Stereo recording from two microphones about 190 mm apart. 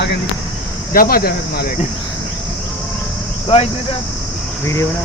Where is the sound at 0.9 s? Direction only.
50° left (ahead or behind).